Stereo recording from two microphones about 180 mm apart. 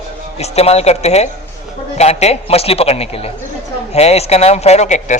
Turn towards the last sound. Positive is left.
turn(degrees=40)  # may be behind; listen again after turning